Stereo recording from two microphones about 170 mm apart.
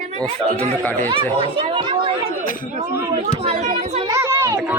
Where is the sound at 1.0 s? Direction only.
35° right (ahead or behind).